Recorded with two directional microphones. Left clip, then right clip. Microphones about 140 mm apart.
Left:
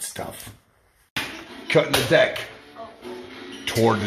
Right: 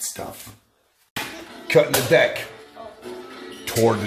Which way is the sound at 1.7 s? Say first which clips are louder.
Right 2 dB; 30° right (ahead or behind).